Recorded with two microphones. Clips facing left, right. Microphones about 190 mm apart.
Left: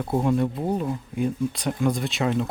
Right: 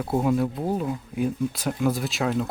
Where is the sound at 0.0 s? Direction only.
5° right (ahead or behind).